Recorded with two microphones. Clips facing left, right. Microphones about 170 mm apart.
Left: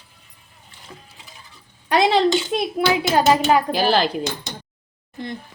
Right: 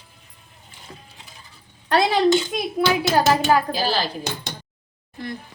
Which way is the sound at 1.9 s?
20° left (ahead or behind).